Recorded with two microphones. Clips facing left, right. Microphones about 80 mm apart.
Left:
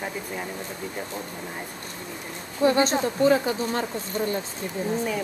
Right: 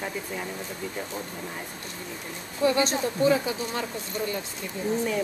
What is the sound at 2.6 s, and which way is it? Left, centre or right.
Speech, left.